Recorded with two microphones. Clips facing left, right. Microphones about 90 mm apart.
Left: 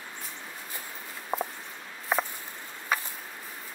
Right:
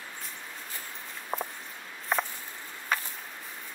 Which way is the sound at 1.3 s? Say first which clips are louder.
Left 3 dB; centre (ahead or behind).